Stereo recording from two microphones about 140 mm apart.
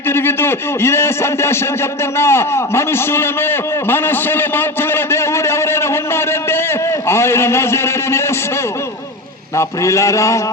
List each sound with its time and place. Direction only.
0.1 s a man's voice: 15° left (ahead or behind)
9.6 s a man's voice: 20° left (ahead or behind)